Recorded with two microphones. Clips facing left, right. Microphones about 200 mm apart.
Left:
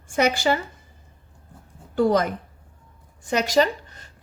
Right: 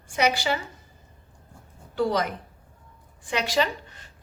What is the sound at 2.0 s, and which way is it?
A woman's voice, 50° left (ahead or behind).